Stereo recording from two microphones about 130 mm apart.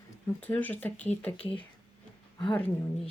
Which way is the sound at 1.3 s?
50° left (ahead or behind).